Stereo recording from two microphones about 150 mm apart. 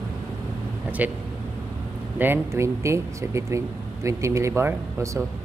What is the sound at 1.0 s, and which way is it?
Speech, 10° right (ahead or behind).